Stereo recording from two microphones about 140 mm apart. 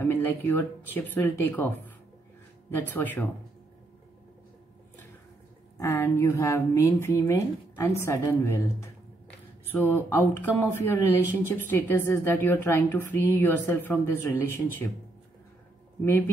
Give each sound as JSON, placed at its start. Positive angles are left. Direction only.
{"t": 0.1, "sound": "a woman's voice", "side_deg": 15}
{"t": 5.8, "sound": "a woman's voice", "side_deg": 20}
{"t": 16.0, "sound": "a woman's voice", "side_deg": 15}